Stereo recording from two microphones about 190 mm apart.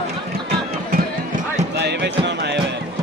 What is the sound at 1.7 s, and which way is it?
Music, 60° right (ahead or behind).